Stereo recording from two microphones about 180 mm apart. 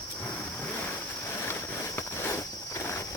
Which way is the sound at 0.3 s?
10° left (ahead or behind).